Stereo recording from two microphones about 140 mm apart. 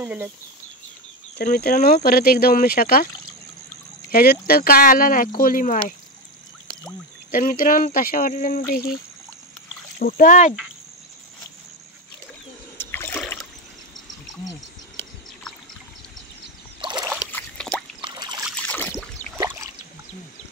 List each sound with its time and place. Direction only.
0.0 s speech: 15° right (ahead or behind)
1.4 s speech: 90° left
4.1 s speech: 90° left
7.2 s speech: 75° left (ahead or behind); by 9.0 s 90° left
10.0 s speech: 85° left
12.7 s splash: 15° left (ahead or behind)
16.8 s boat: 30° right (ahead or behind)
17.3 s a sound: 10° left (ahead or behind)
18.0 s trickle: 30° right (ahead or behind)
18.6 s a sound: 15° left (ahead or behind)
19.3 s boat: 20° right (ahead or behind)